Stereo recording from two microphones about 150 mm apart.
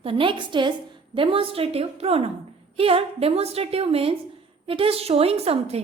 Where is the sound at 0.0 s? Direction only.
35° right (ahead or behind).